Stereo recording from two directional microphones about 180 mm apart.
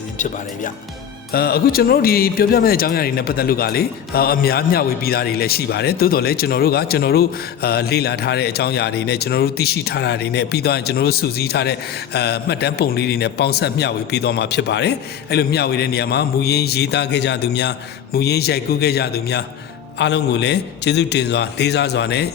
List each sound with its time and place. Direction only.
0.2 s speech: 45° left (ahead or behind)
1.3 s a man's voice: 60° left (ahead or behind)